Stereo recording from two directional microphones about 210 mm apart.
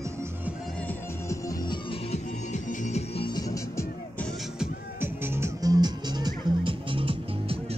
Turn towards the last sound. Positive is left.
turn(degrees=-25)  # may be behind; listen again after turning